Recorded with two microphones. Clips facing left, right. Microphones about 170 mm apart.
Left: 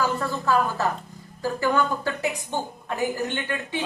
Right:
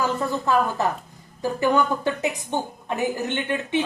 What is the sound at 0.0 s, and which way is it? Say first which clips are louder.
A woman's voice: right 1 dB; 20° right (ahead or behind).